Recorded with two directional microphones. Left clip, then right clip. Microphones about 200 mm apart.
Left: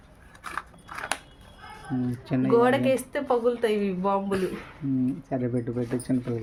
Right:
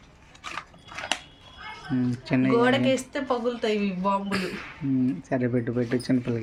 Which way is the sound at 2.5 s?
45° left (ahead or behind).